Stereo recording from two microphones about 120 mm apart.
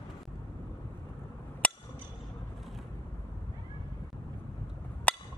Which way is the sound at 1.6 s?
10° left (ahead or behind).